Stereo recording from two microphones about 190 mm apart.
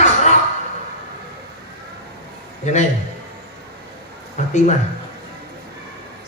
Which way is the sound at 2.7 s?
40° left (ahead or behind).